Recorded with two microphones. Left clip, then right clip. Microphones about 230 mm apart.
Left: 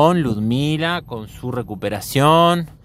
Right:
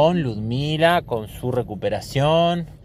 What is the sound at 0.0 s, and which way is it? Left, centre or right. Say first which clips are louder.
Speech: left 3 dB; left.